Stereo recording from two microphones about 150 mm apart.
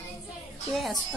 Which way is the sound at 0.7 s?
Centre (ahead or behind).